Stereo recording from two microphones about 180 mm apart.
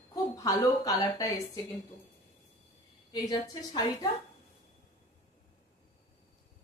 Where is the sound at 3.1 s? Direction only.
20° left (ahead or behind).